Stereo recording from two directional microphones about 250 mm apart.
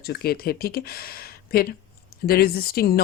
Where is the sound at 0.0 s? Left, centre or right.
Left.